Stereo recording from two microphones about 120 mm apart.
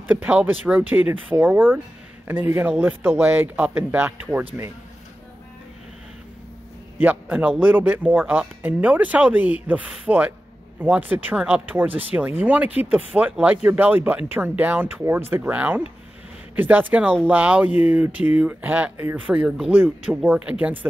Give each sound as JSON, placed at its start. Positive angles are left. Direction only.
{"t": 0.1, "sound": "speech", "side_deg": -15}
{"t": 7.0, "sound": "a man's voice", "side_deg": -15}